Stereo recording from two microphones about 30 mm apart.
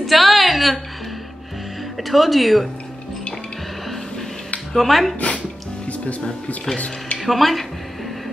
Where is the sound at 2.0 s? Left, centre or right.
Centre.